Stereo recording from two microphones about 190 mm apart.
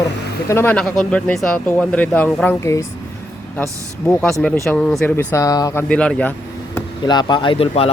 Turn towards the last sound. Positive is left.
turn(degrees=30)  # may be behind; listen again after turning